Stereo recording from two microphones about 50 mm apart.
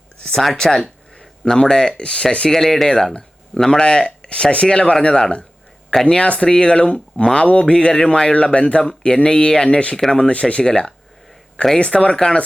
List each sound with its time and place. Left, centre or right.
0.5 s speech: centre
6.1 s speech: left
12.1 s speech: centre